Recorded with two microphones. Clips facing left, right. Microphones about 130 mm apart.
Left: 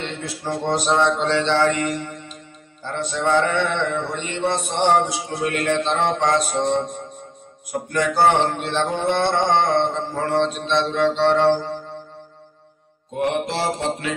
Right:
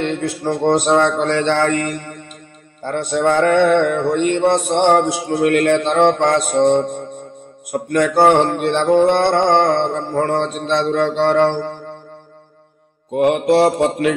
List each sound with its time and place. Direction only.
0.0 s speech: 55° right (ahead or behind)
2.8 s mantra: 55° right (ahead or behind)
7.9 s mantra: 55° right (ahead or behind)
13.1 s mantra: 60° right (ahead or behind)